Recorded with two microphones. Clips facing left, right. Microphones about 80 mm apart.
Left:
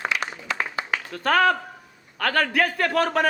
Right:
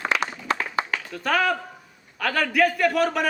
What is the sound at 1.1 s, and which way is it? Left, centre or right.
A man's voice, left.